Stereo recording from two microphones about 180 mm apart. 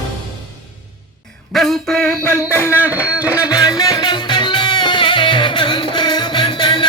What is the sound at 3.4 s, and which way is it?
Music, 20° left (ahead or behind).